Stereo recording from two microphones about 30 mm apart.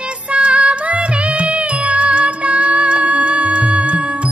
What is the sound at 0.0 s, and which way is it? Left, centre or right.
Music, right.